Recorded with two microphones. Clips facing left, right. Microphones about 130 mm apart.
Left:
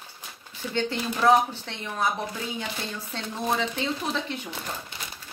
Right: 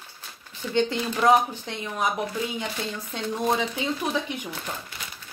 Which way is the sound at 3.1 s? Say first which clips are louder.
Right 3 dB; 15° right (ahead or behind).